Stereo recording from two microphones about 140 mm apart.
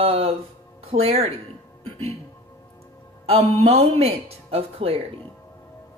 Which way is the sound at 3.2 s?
45° right (ahead or behind).